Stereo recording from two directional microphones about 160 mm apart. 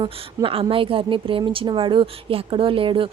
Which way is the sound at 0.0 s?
35° right (ahead or behind).